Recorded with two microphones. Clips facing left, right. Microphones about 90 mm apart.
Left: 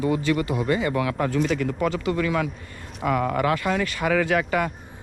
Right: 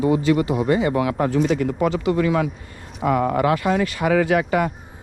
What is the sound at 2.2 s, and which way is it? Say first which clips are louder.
Speech: right 4 dB; 35° right (ahead or behind).